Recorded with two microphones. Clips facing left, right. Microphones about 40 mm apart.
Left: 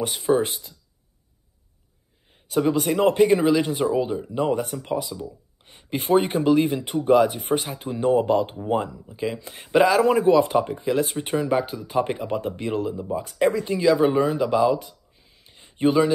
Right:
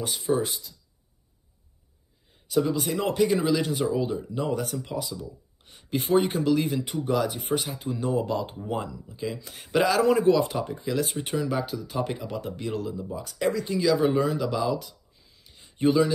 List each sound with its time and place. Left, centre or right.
0.0 s speech: left
2.5 s speech: left; by 4.3 s centre
4.3 s speech: left
9.7 s speech: centre
10.8 s speech: left
11.4 s speech: left